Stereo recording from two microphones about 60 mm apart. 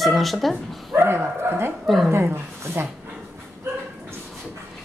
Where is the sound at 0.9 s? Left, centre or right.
Right.